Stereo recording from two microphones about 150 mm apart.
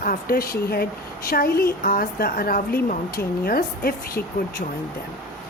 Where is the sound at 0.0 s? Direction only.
75° left (ahead or behind).